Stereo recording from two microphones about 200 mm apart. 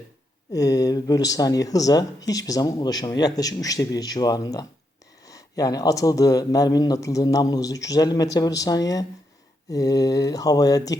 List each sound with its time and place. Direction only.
0.5 s speech: 20° left (ahead or behind)